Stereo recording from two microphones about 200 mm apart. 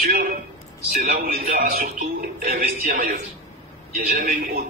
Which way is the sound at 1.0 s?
40° right (ahead or behind).